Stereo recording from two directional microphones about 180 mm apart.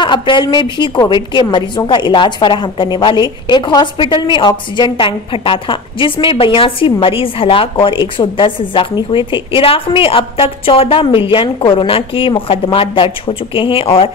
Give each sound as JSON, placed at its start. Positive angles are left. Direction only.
{"t": 0.0, "sound": "a woman's voice", "side_deg": 25}